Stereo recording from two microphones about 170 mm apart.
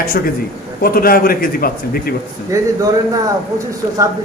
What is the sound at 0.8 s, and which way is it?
Speech, 60° left (ahead or behind).